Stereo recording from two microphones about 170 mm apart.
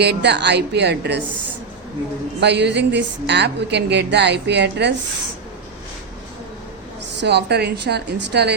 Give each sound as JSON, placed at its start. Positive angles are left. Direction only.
{"t": 0.0, "sound": "a woman's voice", "side_deg": -80}
{"t": 2.4, "sound": "a woman's voice", "side_deg": -85}
{"t": 7.2, "sound": "a woman's voice", "side_deg": -80}